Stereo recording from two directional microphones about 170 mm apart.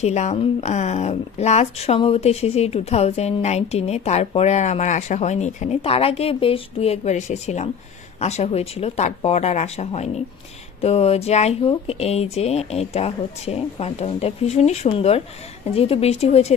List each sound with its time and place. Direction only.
0.0 s speech: 40° left (ahead or behind)